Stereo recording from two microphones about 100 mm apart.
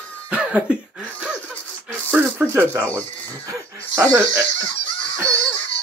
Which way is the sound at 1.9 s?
20° right (ahead or behind).